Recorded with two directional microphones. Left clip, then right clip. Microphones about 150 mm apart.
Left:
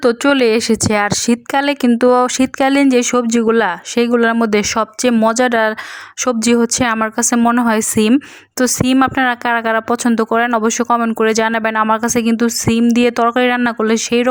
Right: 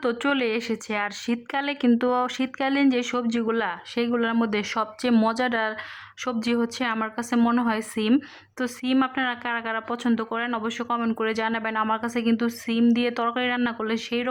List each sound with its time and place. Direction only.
0.0 s speech: 40° left (ahead or behind)